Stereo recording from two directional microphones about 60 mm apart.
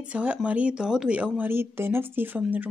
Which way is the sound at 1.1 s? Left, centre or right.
Right.